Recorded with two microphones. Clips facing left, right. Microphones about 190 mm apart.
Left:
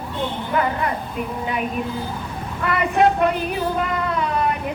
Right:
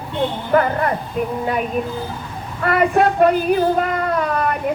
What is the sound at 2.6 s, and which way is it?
Speech, 50° right (ahead or behind).